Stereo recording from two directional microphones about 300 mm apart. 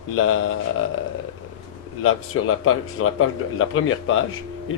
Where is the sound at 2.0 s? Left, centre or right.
Left.